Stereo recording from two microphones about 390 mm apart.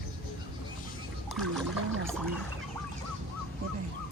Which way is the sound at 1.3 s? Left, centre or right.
Centre.